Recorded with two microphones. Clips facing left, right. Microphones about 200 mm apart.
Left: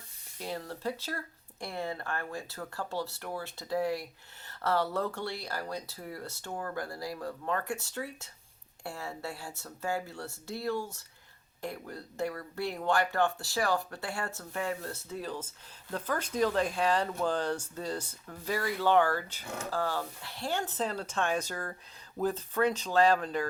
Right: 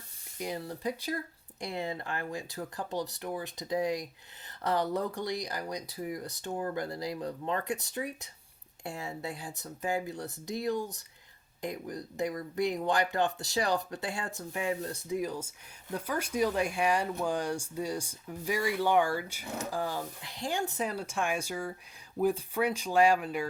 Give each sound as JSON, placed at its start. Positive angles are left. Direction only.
{"t": 0.3, "sound": "speech", "side_deg": -15}